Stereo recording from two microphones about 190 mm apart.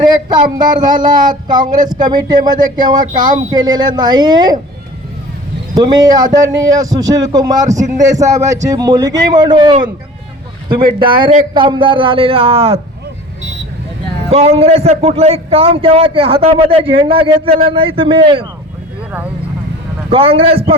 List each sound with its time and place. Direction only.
0.1 s a man's voice: 20° right (ahead or behind)
5.7 s a man's voice: 20° right (ahead or behind)
7.7 s a man's voice: 40° right (ahead or behind)
7.9 s a man's voice: 20° right (ahead or behind)
14.3 s a man's voice: 30° right (ahead or behind)
20.1 s a man's voice: 30° right (ahead or behind)